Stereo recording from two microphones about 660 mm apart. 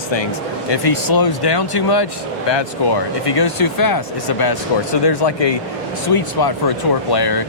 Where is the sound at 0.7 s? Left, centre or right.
Left.